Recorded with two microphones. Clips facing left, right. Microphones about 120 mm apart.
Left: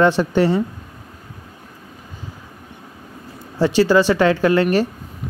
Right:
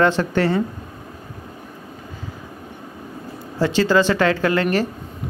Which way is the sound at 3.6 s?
15° left (ahead or behind).